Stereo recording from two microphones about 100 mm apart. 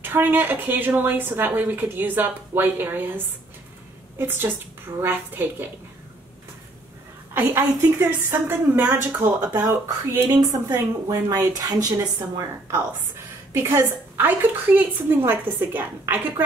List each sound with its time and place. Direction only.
0.0 s a woman's voice: 20° right (ahead or behind)
4.2 s a woman's voice: 20° right (ahead or behind)
7.3 s a woman's voice: 20° right (ahead or behind)
11.1 s speech: 40° right (ahead or behind)
13.5 s a woman's voice: 25° right (ahead or behind)